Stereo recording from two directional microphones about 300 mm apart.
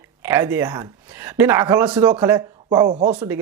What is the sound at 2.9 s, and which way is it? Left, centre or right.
Speech, right.